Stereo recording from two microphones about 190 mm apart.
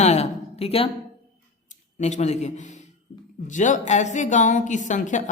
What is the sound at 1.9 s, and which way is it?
A woman's voice, 35° left (ahead or behind).